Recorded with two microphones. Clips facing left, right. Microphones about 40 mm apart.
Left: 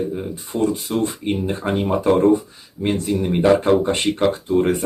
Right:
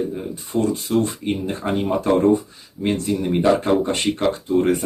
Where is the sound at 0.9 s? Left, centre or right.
Centre.